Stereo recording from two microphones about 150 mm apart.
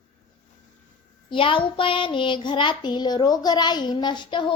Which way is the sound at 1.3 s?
35° left (ahead or behind).